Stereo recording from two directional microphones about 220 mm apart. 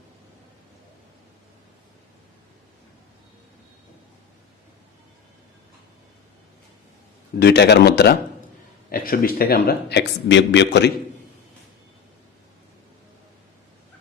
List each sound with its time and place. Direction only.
7.3 s a man's voice: 50° left (ahead or behind)